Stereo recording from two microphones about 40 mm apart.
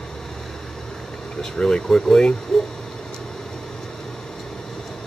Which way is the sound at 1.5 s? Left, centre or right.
Centre.